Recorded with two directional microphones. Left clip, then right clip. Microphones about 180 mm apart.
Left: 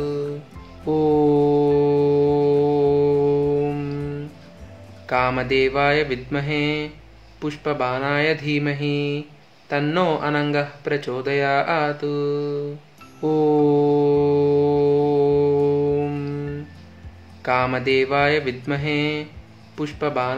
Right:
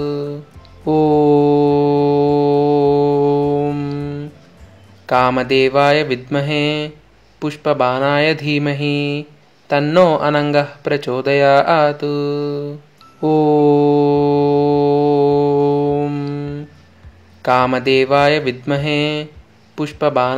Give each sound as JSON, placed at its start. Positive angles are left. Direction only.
{"t": 0.0, "sound": "music", "side_deg": -40}
{"t": 0.8, "sound": "mantra", "side_deg": -40}
{"t": 9.7, "sound": "speech", "side_deg": -40}
{"t": 13.2, "sound": "mantra", "side_deg": -40}
{"t": 17.4, "sound": "speech", "side_deg": -40}